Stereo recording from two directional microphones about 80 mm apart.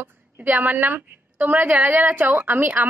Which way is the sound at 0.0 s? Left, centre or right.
Right.